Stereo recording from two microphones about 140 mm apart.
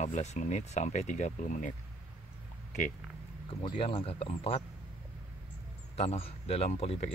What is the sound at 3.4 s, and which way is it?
Speech, 40° left (ahead or behind).